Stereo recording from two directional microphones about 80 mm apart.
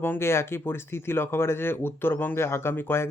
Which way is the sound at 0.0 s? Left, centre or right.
Left.